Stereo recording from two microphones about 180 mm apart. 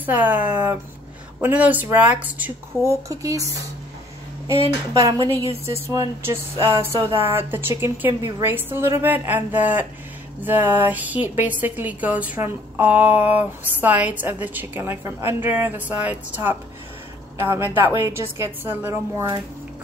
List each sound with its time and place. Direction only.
0.0 s a woman's voice: 10° right (ahead or behind)
4.9 s a woman's voice: 20° right (ahead or behind)